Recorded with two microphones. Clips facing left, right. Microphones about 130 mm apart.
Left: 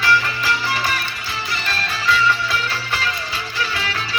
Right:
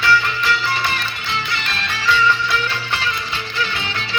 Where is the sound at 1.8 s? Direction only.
35° left (ahead or behind).